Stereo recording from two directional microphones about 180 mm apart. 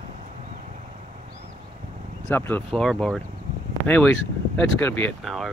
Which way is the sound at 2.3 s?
10° left (ahead or behind).